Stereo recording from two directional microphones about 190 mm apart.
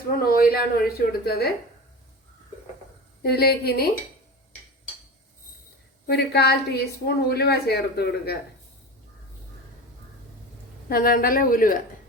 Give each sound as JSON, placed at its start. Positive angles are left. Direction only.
{"t": 0.3, "sound": "a woman's voice", "side_deg": 55}
{"t": 3.2, "sound": "a woman's voice", "side_deg": 55}
{"t": 6.1, "sound": "a woman's voice", "side_deg": 60}
{"t": 10.8, "sound": "a woman's voice", "side_deg": 50}